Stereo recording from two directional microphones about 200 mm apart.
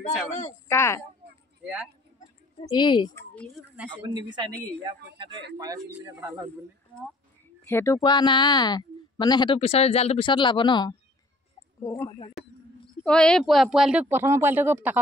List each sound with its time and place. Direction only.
0.7 s speech: 15° left (ahead or behind)
1.6 s speech: 5° right (ahead or behind)
2.7 s speech: 20° left (ahead or behind)
4.3 s a woman's voice: 20° right (ahead or behind)
7.6 s speech: 15° left (ahead or behind)
13.0 s speech: 5° left (ahead or behind)